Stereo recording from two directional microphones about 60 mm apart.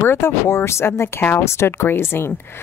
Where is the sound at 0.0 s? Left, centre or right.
Left.